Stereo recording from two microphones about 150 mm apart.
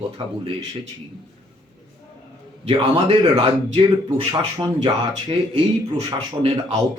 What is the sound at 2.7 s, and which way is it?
Speech, 35° right (ahead or behind).